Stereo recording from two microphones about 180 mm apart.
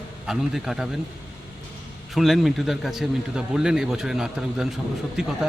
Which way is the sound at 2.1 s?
Centre (ahead or behind).